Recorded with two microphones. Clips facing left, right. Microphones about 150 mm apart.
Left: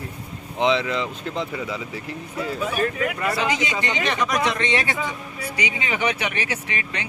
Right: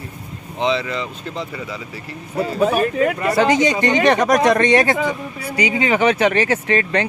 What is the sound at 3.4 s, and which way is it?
Speech, 45° right (ahead or behind).